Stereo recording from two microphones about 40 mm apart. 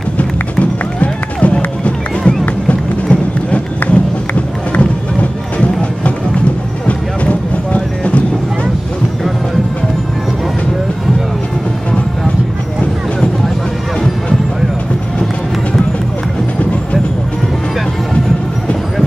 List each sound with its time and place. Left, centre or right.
0.2 s run: left
3.9 s music: left
6.9 s clip-clop: left